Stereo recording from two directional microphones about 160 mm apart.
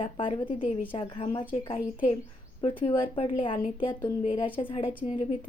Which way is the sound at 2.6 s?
30° left (ahead or behind).